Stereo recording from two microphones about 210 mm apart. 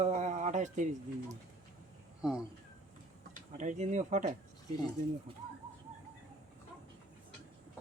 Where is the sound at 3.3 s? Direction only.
35° right (ahead or behind).